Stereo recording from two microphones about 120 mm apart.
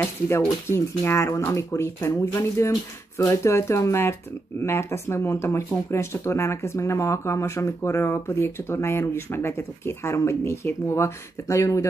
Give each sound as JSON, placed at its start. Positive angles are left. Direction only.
{"t": 0.0, "sound": "speech", "side_deg": 20}